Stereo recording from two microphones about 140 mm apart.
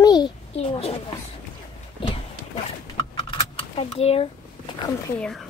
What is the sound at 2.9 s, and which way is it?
Typing, 40° left (ahead or behind).